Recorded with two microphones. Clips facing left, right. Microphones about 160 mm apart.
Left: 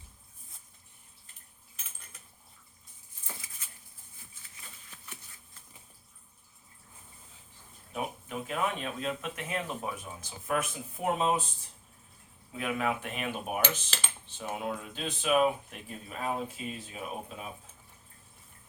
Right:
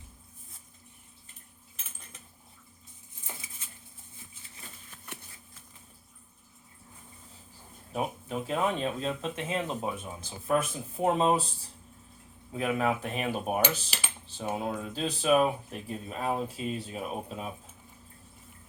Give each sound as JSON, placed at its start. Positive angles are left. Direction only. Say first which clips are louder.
{"t": 3.6, "sound": "dishes", "louder": "right 2 dB", "side_deg": -25}
{"t": 7.9, "sound": "speech", "louder": "right 4 dB", "side_deg": -30}
{"t": 12.5, "sound": "speech", "louder": "right 3 dB", "side_deg": -35}
{"t": 13.9, "sound": "computer keyboard", "louder": "even", "side_deg": -10}
{"t": 14.5, "sound": "speech", "louder": "right 2 dB", "side_deg": -35}